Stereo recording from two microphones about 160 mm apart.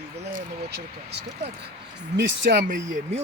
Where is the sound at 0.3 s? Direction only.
90° right.